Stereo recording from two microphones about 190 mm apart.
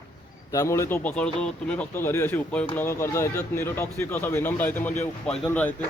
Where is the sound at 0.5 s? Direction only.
15° left (ahead or behind).